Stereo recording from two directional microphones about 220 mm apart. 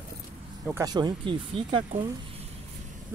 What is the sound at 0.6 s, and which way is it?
Speech, 15° right (ahead or behind).